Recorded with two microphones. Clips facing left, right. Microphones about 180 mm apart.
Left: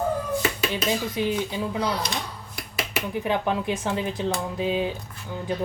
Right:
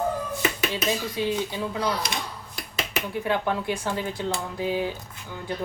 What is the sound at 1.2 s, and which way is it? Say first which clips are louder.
Speech: left 1 dB; 20° left (ahead or behind).